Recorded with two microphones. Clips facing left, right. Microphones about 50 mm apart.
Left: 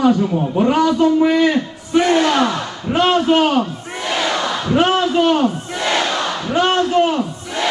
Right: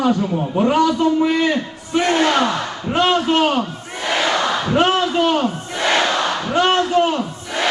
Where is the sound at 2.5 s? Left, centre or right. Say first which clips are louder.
Right 1 dB; right.